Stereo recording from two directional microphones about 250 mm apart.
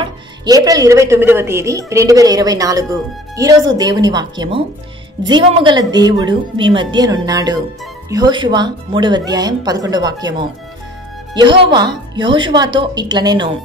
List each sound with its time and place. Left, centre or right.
0.0 s speech: centre